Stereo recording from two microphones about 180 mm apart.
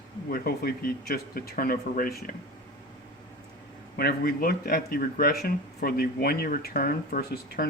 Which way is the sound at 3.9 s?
60° left (ahead or behind).